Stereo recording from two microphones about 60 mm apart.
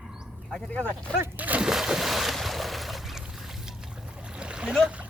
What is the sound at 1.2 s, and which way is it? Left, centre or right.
Speech, right.